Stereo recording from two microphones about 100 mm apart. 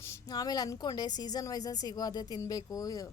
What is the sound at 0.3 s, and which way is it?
A woman's voice, 40° left (ahead or behind).